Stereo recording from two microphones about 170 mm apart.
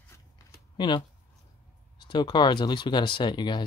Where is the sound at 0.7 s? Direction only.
25° left (ahead or behind).